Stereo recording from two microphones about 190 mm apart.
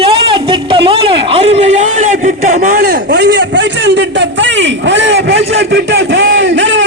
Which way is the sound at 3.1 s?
65° right (ahead or behind).